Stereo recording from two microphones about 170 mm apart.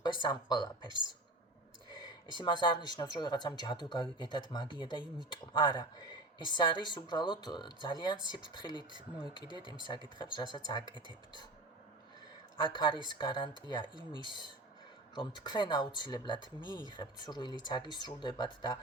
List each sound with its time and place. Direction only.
0.0 s speech: 25° left (ahead or behind)
2.4 s speech: 25° left (ahead or behind)
10.2 s speech: 25° left (ahead or behind)
12.6 s speech: 30° left (ahead or behind)